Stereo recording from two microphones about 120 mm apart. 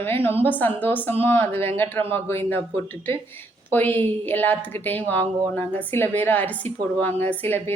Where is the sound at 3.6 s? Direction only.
15° left (ahead or behind).